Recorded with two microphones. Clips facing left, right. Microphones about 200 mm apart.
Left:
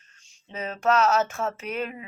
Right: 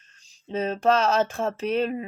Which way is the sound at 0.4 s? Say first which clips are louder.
Right 3 dB; 30° right (ahead or behind).